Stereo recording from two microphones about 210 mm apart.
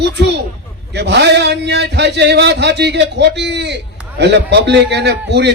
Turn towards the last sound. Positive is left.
turn(degrees=-55)  # may be behind; listen again after turning